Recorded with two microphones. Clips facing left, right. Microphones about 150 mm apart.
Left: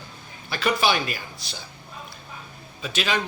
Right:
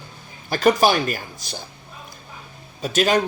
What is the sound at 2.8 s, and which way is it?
Speech, 45° right (ahead or behind).